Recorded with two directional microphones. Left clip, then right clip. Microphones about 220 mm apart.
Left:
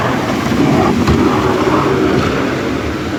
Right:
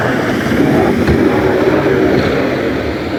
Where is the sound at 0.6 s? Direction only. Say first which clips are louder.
Even; 30° left (ahead or behind).